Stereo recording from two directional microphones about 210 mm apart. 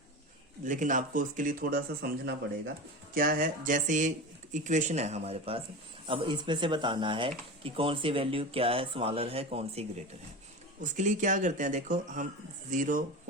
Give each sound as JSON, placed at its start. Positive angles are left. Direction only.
{"t": 0.6, "sound": "speech", "side_deg": -40}